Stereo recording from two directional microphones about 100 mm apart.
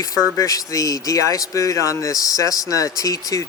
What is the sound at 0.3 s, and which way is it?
A man's voice, 35° left (ahead or behind).